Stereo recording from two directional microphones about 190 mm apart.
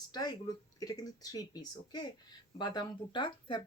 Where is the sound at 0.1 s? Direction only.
20° left (ahead or behind).